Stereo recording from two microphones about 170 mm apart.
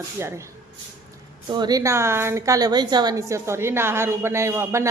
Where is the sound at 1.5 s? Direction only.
25° right (ahead or behind).